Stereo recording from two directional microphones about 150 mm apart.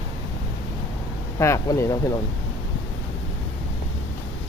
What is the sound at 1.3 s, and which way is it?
Speech, 20° left (ahead or behind).